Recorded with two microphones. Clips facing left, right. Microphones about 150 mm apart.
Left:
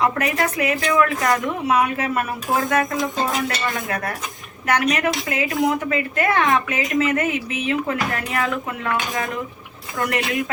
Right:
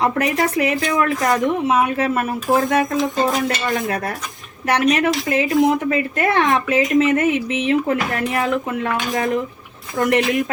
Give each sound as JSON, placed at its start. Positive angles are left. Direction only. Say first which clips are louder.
{"t": 0.0, "sound": "a woman's voice", "louder": "right 2 dB", "side_deg": -30}